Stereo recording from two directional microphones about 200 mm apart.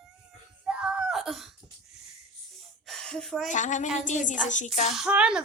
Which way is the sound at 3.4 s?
40° left (ahead or behind).